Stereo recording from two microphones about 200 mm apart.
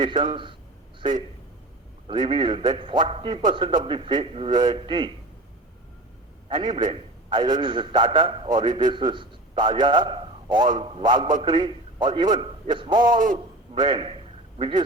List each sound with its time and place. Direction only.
0.0 s a man's voice: 25° right (ahead or behind)
2.0 s a man's voice: 25° right (ahead or behind)
6.5 s a man's voice: 25° right (ahead or behind)
13.1 s a man's voice: 40° right (ahead or behind)
13.7 s a man's voice: 25° right (ahead or behind)